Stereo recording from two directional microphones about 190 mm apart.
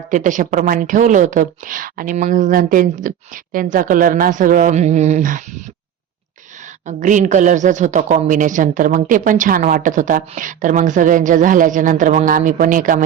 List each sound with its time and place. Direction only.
0.1 s a woman's voice: 40° right (ahead or behind)
6.8 s a woman's voice: 40° right (ahead or behind)